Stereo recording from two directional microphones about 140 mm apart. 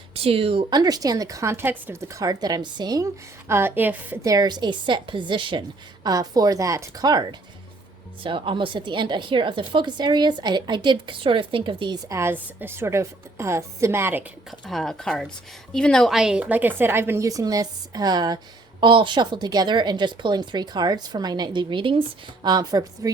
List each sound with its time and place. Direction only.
0.1 s speech: 45° right (ahead or behind)
0.8 s a woman's voice: 30° right (ahead or behind)
3.5 s a woman's voice: 15° right (ahead or behind)
14.7 s a woman's voice: 5° left (ahead or behind); by 23.1 s 25° right (ahead or behind)